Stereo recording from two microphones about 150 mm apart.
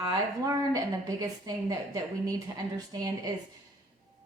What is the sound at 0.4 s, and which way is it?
A woman's voice, 25° right (ahead or behind).